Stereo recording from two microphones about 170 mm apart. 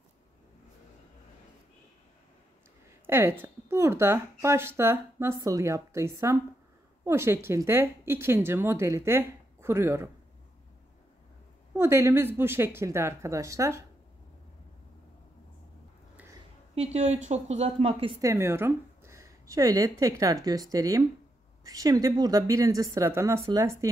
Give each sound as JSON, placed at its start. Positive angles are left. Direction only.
{"t": 3.1, "sound": "speech", "side_deg": -15}
{"t": 11.7, "sound": "speech", "side_deg": -15}
{"t": 16.7, "sound": "a woman's voice", "side_deg": -40}
{"t": 18.2, "sound": "a woman's voice", "side_deg": -15}